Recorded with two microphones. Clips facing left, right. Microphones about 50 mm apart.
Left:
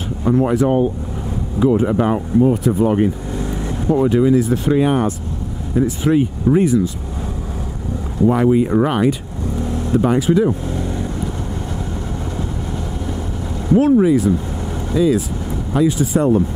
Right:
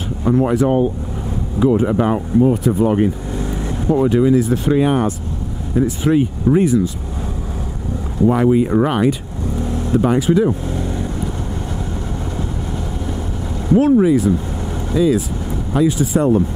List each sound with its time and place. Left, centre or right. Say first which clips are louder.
0.3 s speech: even; right
8.3 s speech: even; right
10.4 s vehicle: even; right
13.7 s speech: even; right